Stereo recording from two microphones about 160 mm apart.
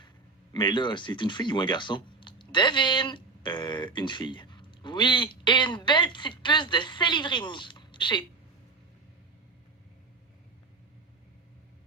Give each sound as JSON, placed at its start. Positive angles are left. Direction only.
{"t": 0.5, "sound": "speech", "side_deg": 30}